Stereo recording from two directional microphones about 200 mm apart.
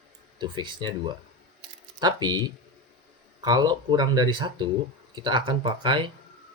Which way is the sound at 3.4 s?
20° right (ahead or behind).